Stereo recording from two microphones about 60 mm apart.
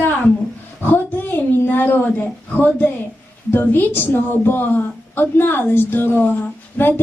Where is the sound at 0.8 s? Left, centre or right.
Left.